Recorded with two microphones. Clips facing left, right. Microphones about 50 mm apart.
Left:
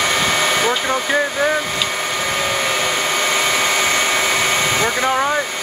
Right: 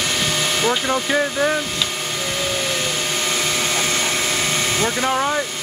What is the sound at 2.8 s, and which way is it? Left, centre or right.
Vacuum cleaner, left.